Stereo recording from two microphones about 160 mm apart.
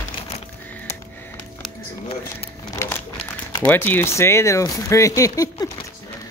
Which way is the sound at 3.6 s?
10° left (ahead or behind).